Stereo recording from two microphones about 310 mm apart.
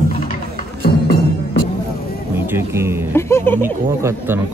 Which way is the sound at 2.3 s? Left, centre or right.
Centre.